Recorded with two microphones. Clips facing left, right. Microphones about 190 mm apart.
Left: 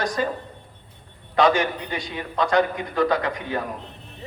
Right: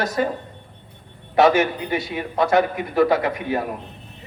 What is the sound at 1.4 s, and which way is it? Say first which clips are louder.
A man's voice: right 3 dB; 25° right (ahead or behind).